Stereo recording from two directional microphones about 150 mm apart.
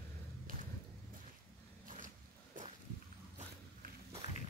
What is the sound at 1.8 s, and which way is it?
Zipper, 60° right (ahead or behind).